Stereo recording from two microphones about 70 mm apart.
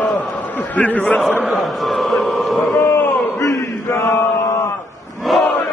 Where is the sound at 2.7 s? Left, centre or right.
Left.